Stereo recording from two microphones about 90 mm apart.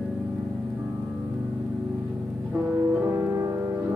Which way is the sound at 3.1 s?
30° right (ahead or behind).